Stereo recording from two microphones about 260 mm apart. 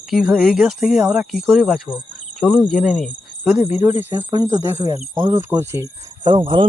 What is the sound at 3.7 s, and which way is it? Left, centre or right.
Speech, centre.